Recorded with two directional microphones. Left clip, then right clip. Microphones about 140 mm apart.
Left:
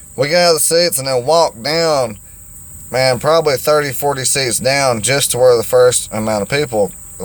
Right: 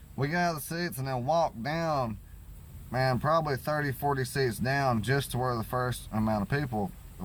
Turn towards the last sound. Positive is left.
turn(degrees=20)  # may be behind; listen again after turning